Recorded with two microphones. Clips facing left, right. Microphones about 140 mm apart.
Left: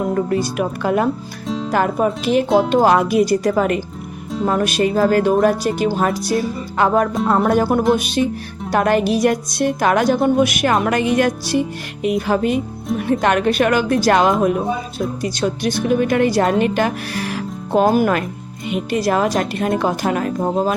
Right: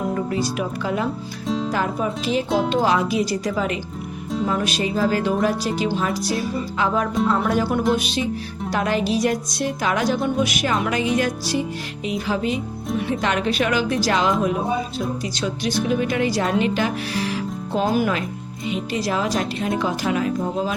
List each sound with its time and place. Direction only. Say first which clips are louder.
0.6 s speech: left 6 dB; 55° left (ahead or behind)
1.5 s music: even; centre (ahead or behind)
1.7 s speech: left 6 dB; 55° left (ahead or behind)